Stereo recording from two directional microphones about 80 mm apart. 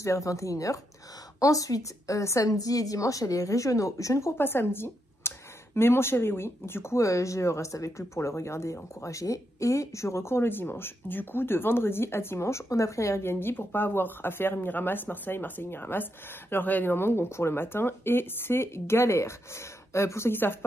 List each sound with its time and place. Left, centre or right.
0.0 s a woman's voice: left